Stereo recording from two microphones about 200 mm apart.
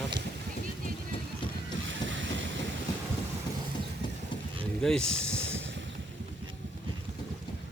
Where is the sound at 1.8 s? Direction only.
70° right (ahead or behind).